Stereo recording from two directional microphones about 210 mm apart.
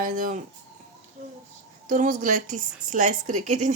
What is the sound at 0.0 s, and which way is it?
Speech, 40° right (ahead or behind).